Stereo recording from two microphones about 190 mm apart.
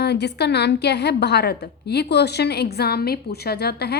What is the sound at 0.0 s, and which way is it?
A woman's voice, 60° left (ahead or behind).